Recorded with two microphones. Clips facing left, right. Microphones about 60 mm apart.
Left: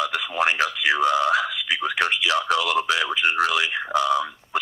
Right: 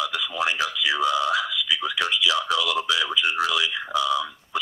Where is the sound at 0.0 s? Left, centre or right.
Left.